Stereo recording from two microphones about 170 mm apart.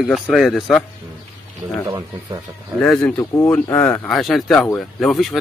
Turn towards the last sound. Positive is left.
turn(degrees=0)  # may be behind; listen again after turning